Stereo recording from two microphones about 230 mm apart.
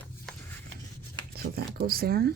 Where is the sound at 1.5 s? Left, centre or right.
Right.